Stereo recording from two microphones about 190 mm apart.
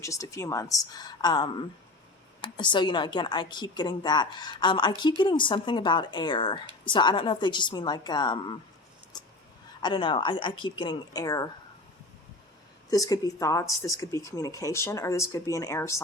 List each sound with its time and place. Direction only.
0.0 s a woman's voice: 15° left (ahead or behind)
9.1 s fowl: 20° left (ahead or behind)
9.8 s a woman's voice: 25° left (ahead or behind)
12.9 s speech: 20° left (ahead or behind)